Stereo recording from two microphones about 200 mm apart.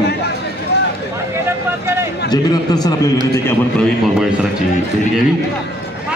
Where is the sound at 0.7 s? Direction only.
60° left (ahead or behind).